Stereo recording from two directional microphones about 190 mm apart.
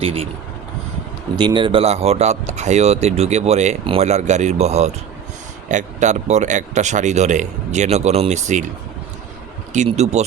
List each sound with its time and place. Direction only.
0.0 s speech: 30° right (ahead or behind)
1.4 s speech: 25° right (ahead or behind)
9.7 s speech: 35° right (ahead or behind)